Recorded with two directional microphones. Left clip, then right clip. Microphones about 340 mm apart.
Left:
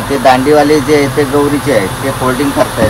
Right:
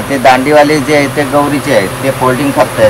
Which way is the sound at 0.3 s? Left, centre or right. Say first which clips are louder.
Right 1 dB; right.